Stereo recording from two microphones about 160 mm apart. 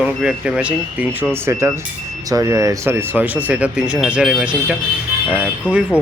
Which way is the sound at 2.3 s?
20° right (ahead or behind).